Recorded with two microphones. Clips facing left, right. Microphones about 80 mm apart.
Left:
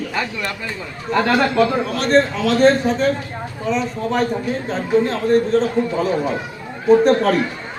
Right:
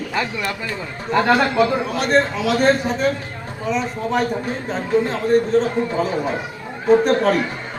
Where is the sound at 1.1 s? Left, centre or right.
Centre.